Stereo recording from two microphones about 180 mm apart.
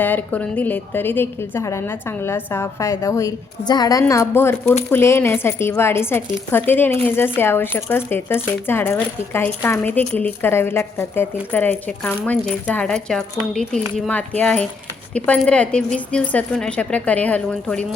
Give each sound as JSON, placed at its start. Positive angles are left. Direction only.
{"t": 0.0, "sound": "speech", "side_deg": 10}